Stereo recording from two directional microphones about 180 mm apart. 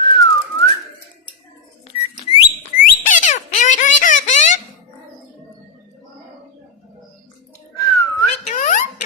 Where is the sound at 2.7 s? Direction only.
45° left (ahead or behind).